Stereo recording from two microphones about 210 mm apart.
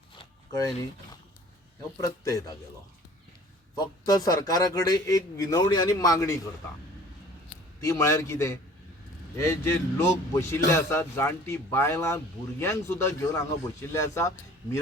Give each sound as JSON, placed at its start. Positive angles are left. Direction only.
{"t": 0.2, "sound": "shuffling cards", "side_deg": 15}
{"t": 2.0, "sound": "a man's voice", "side_deg": 15}
{"t": 3.8, "sound": "a man's voice", "side_deg": 15}
{"t": 7.9, "sound": "a man's voice", "side_deg": 15}